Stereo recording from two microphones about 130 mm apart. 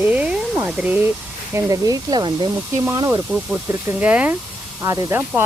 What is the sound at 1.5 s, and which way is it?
Speech, 25° right (ahead or behind).